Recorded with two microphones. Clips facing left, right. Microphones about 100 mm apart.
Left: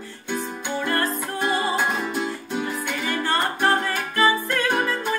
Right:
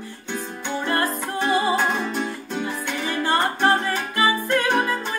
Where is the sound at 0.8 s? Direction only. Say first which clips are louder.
Right 1 dB; 20° right (ahead or behind).